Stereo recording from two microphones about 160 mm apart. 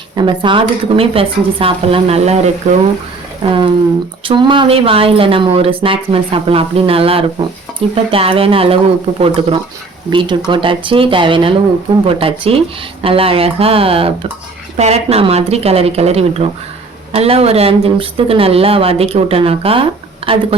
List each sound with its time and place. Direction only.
0.2 s speech: 30° right (ahead or behind)
4.3 s speech: 30° right (ahead or behind)